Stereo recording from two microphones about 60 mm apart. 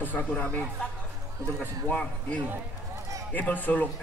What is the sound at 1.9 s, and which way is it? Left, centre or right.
A man's voice, left.